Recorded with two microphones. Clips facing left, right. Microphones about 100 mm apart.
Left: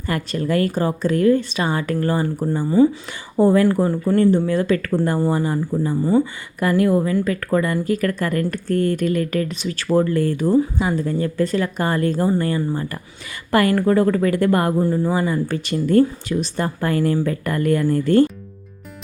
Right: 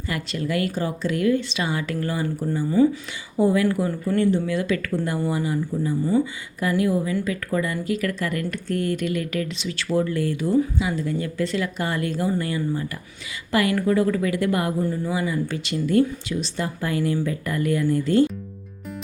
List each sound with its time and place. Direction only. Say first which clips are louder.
0.1 s speech: left 5 dB; 45° left (ahead or behind)
2.6 s speech: left 3 dB; 25° left (ahead or behind)
3.3 s speech: left 5 dB; 40° left (ahead or behind)